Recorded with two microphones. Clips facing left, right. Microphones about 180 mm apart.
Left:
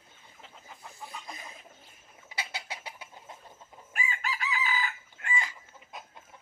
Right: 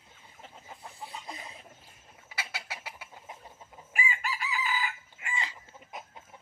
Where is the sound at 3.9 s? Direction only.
10° right (ahead or behind).